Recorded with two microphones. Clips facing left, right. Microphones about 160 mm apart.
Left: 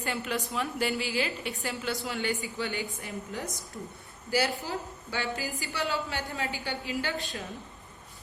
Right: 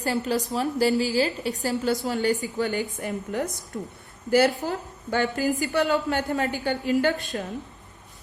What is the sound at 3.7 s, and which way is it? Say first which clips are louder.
Speech: right 10 dB; 65° right (ahead or behind).